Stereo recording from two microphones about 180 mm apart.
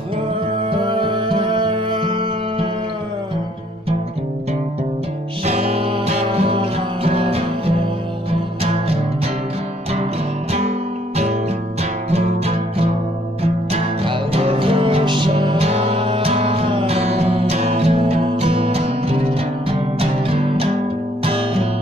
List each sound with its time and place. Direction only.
0.7 s music: 25° right (ahead or behind)
5.4 s music: 35° right (ahead or behind)
12.1 s music: 35° right (ahead or behind)